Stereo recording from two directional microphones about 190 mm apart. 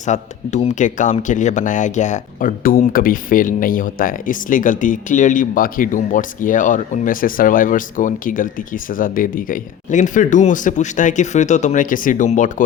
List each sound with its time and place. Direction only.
0.0 s speech: 40° left (ahead or behind)